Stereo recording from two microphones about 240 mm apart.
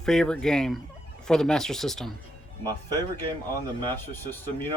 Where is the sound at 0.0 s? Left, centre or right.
Centre.